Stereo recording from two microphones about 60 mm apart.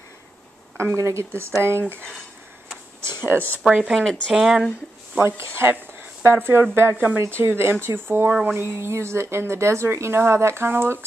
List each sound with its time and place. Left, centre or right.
0.7 s a woman's voice: right
3.6 s speech: centre
3.9 s speech: centre
4.3 s speech: centre
5.2 s a woman's voice: right